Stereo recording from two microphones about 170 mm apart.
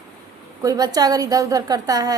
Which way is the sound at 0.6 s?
20° right (ahead or behind).